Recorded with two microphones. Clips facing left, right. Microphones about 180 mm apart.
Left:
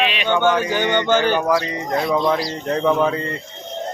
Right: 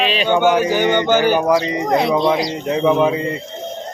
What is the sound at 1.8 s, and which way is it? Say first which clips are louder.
Speech: right 5 dB; 75° right (ahead or behind).